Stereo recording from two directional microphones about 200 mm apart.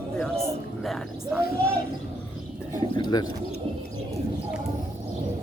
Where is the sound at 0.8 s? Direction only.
Centre (ahead or behind).